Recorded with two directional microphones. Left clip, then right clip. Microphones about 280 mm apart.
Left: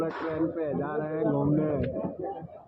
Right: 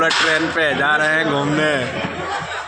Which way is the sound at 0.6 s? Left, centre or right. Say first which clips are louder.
Right 15 dB; right.